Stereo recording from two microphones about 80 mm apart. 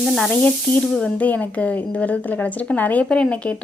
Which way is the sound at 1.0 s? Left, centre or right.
Centre.